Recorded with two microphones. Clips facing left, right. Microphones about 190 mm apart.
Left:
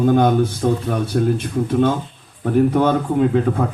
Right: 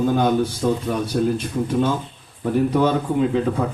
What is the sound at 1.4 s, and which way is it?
Speech, 55° left (ahead or behind).